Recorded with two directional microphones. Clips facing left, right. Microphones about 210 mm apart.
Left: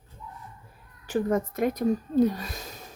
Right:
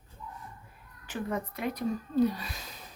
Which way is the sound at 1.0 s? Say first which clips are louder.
Left 8 dB; 45° left (ahead or behind).